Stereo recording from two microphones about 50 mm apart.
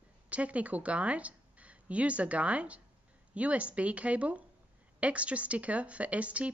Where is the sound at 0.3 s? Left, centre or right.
Right.